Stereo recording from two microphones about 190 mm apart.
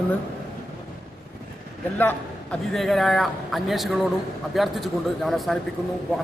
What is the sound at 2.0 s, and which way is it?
A man's voice, 10° left (ahead or behind).